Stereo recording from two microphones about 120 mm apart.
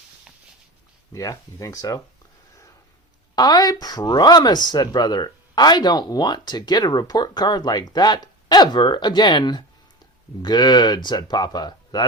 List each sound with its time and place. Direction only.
1.1 s speech: 30° left (ahead or behind)
3.3 s speech: 35° left (ahead or behind)